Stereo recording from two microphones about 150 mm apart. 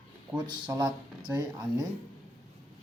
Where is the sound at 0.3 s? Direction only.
30° right (ahead or behind).